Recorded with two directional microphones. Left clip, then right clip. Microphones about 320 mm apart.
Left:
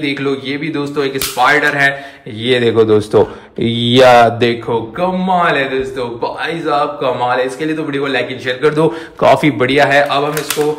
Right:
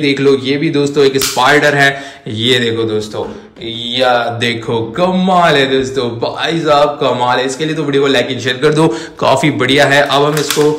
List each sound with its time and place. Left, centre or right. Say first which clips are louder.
0.0 s a man's voice: right 6 dB; centre
3.6 s mantra: left 5 dB; centre
4.5 s a man's voice: even; centre